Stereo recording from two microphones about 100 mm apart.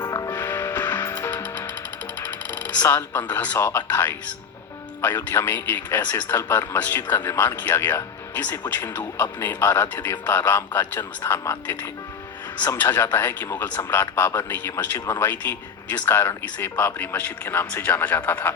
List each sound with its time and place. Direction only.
0.0 s music: 35° left (ahead or behind)
0.3 s music: 20° left (ahead or behind)
2.2 s speech: 20° left (ahead or behind)